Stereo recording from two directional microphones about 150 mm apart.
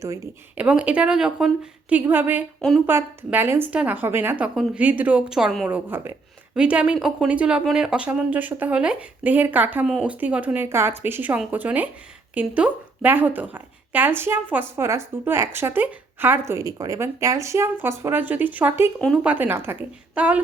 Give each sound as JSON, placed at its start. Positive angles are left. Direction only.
{"t": 0.5, "sound": "speech", "side_deg": -10}
{"t": 2.6, "sound": "speech", "side_deg": 0}
{"t": 2.8, "sound": "speech", "side_deg": -15}
{"t": 5.6, "sound": "a woman's voice", "side_deg": -10}